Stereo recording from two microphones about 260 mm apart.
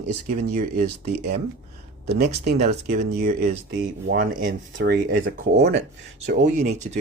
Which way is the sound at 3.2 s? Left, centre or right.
Right.